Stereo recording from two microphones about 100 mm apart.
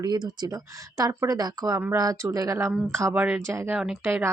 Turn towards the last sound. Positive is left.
turn(degrees=-20)  # may be behind; listen again after turning